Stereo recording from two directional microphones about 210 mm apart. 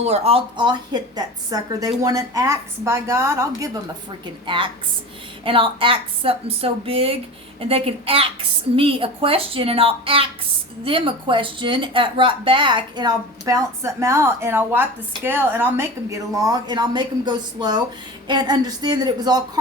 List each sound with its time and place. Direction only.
0.0 s a woman's voice: 30° right (ahead or behind)